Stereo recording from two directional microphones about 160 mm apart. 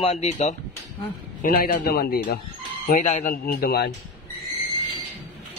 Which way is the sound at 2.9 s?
45° left (ahead or behind).